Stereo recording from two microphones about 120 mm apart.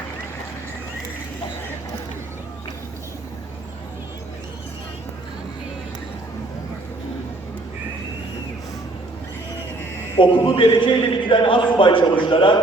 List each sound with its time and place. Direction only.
10.2 s a man's voice: 45° left (ahead or behind)